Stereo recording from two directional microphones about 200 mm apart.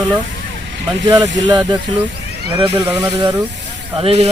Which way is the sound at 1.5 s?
20° right (ahead or behind).